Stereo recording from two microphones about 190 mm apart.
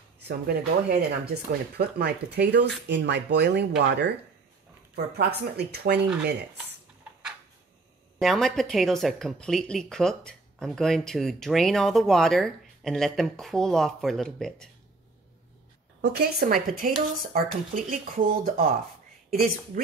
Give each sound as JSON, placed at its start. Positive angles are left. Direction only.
{"t": 0.3, "sound": "speech", "side_deg": -55}
{"t": 8.2, "sound": "speech", "side_deg": 0}
{"t": 16.0, "sound": "speech", "side_deg": -60}